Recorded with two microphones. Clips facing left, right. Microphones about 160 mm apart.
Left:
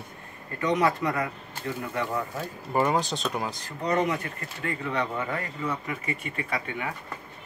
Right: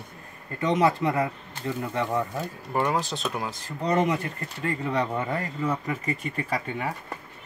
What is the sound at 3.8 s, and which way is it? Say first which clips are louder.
Speech: right 2 dB; 30° right (ahead or behind).